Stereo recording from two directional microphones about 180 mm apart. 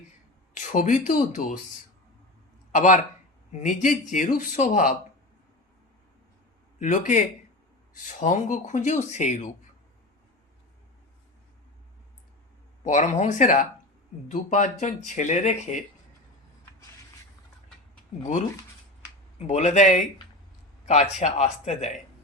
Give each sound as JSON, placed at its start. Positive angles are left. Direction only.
{"t": 0.5, "sound": "speech", "side_deg": 45}
{"t": 2.7, "sound": "speech", "side_deg": 45}
{"t": 6.7, "sound": "speech", "side_deg": 45}
{"t": 12.8, "sound": "speech", "side_deg": 40}
{"t": 19.5, "sound": "speech", "side_deg": 40}